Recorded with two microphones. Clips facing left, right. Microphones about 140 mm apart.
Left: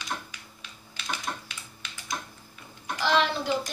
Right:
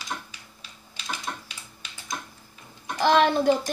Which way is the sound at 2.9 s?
50° right (ahead or behind).